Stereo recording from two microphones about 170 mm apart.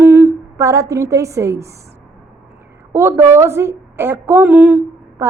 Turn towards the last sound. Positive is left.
turn(degrees=-15)  # may be behind; listen again after turning